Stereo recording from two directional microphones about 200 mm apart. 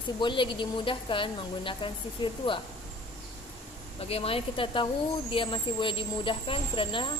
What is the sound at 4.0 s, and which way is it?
Speech, 30° left (ahead or behind).